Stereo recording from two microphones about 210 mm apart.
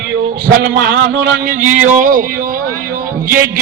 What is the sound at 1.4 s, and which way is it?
Speech, 40° right (ahead or behind).